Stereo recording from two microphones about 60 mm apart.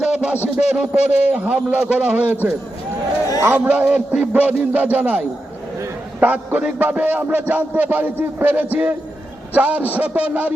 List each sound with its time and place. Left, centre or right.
0.0 s a sound: centre
0.5 s a man's voice: centre
3.7 s a man's voice: centre
4.3 s a man's voice: right